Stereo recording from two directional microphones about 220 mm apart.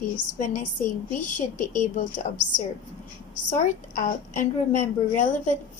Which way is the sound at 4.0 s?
35° left (ahead or behind).